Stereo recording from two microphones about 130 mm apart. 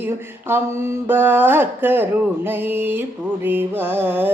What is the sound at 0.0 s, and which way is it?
Mantra, 20° right (ahead or behind).